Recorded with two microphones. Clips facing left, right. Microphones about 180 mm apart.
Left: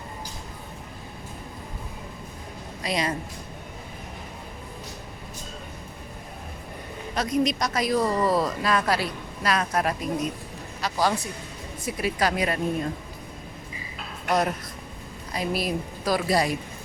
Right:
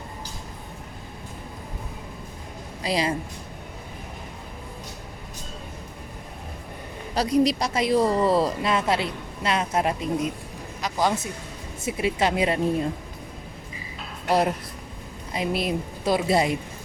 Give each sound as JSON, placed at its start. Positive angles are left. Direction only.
{"t": 2.8, "sound": "speech", "side_deg": -30}
{"t": 7.1, "sound": "a man's voice", "side_deg": -35}
{"t": 15.3, "sound": "speech", "side_deg": -25}